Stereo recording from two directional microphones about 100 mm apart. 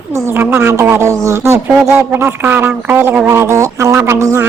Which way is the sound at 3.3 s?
30° right (ahead or behind).